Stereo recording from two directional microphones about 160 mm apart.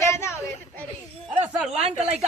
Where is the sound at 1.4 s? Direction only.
5° right (ahead or behind).